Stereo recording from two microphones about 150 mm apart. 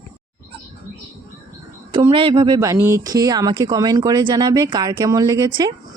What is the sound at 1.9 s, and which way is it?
Speech, 35° right (ahead or behind).